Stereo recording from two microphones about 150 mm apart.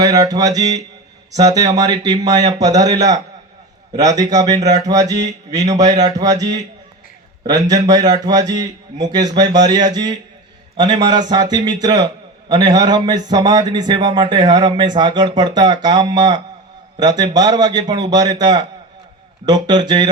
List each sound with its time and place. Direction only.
0.0 s a man's voice: 25° right (ahead or behind)
4.2 s a man's voice: 25° right (ahead or behind)